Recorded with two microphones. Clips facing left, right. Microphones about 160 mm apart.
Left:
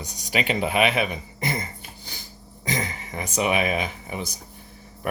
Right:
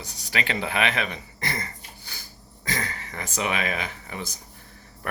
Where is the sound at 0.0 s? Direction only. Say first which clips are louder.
Left 4 dB; 15° left (ahead or behind).